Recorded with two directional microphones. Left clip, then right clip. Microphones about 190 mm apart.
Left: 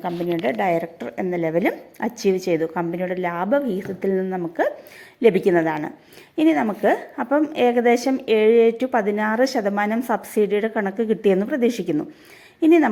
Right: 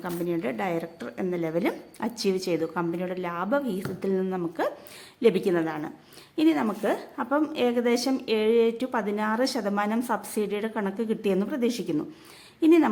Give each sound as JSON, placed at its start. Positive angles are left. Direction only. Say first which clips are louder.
{"t": 0.0, "sound": "a woman's voice", "louder": "left 6 dB", "side_deg": 15}